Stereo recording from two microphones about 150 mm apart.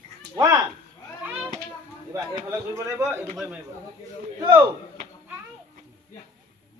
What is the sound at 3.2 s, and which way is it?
Speech, 5° left (ahead or behind).